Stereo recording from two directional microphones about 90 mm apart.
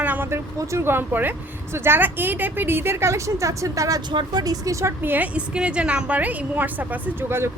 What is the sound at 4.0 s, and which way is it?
Speech, 50° right (ahead or behind).